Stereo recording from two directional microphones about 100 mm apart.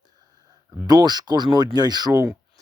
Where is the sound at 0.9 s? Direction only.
45° right (ahead or behind).